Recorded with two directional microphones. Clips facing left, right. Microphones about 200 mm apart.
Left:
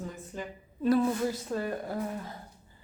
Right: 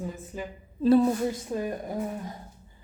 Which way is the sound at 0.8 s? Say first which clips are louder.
Right 5 dB; 30° right (ahead or behind).